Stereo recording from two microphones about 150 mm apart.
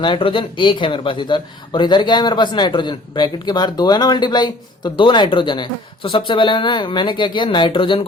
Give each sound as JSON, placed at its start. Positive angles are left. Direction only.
{"t": 0.0, "sound": "speech", "side_deg": 35}